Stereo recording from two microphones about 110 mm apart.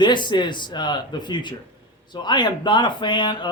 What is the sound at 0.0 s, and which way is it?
Speech, 45° left (ahead or behind).